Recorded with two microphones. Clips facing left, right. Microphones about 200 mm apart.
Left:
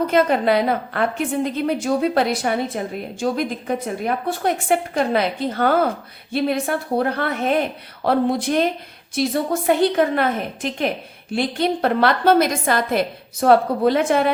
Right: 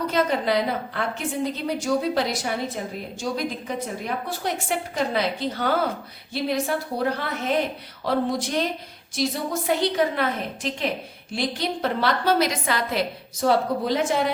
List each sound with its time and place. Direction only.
0.1 s a woman's voice: 55° left (ahead or behind)